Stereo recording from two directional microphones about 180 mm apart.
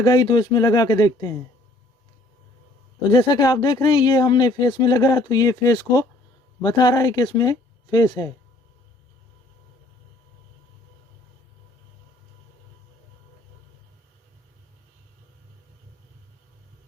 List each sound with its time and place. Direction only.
0.0 s speech: 25° left (ahead or behind)
3.1 s speech: 25° left (ahead or behind)